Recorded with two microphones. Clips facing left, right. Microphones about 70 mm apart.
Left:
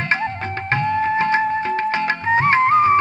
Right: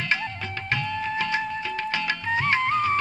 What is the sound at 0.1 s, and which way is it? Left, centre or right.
Music, left.